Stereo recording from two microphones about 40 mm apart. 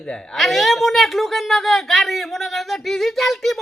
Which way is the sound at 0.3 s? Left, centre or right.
Centre.